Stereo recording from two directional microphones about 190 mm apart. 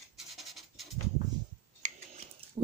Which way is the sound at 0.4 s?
Centre (ahead or behind).